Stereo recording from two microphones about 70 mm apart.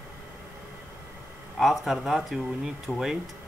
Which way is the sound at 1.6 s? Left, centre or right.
Centre.